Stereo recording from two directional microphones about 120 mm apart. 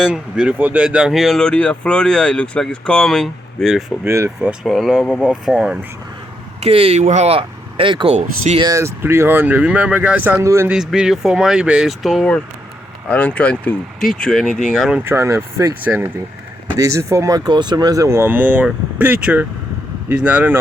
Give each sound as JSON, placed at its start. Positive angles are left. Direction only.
{"t": 0.0, "sound": "speech", "side_deg": -10}
{"t": 4.0, "sound": "speech", "side_deg": -20}
{"t": 4.6, "sound": "speech", "side_deg": 0}
{"t": 6.6, "sound": "speech", "side_deg": -55}
{"t": 8.7, "sound": "speech", "side_deg": -20}
{"t": 10.7, "sound": "speech", "side_deg": -5}
{"t": 14.9, "sound": "speech", "side_deg": -20}
{"t": 15.8, "sound": "speech", "side_deg": -15}
{"t": 16.7, "sound": "speech", "side_deg": -25}